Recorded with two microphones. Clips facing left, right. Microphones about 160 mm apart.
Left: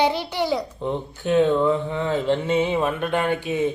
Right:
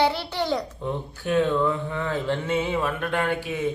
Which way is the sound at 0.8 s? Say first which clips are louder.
Left 3 dB; 20° left (ahead or behind).